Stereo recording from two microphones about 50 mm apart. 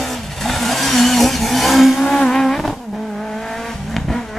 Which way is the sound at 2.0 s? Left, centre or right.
Centre.